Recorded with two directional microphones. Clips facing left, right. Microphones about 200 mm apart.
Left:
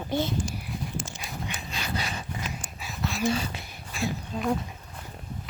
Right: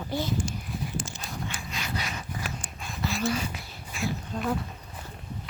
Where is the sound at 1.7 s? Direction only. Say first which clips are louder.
Left 3 dB; 30° left (ahead or behind).